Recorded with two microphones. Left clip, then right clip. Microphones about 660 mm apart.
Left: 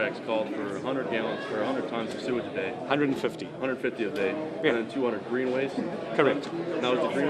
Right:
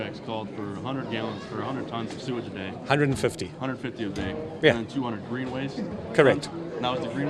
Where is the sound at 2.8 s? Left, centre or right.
Right.